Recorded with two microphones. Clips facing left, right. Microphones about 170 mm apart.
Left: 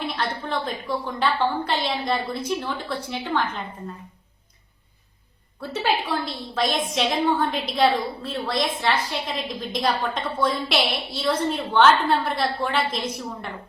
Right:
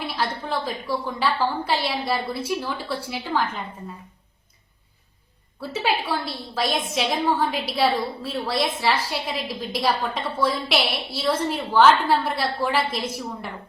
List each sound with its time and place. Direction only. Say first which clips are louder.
0.4 s a woman's voice: even; 5° right (ahead or behind)
5.5 s a woman's voice: even; 5° right (ahead or behind)